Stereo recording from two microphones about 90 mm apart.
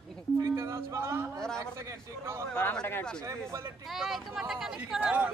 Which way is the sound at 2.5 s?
15° left (ahead or behind).